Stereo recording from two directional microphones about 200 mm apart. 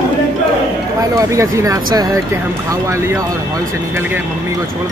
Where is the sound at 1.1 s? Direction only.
15° right (ahead or behind).